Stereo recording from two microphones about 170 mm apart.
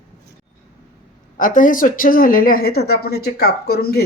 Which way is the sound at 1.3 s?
50° left (ahead or behind).